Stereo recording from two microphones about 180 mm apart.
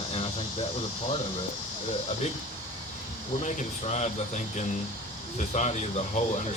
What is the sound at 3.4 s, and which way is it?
Speech, 40° left (ahead or behind).